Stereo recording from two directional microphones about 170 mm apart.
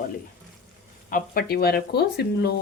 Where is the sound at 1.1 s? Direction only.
60° left (ahead or behind).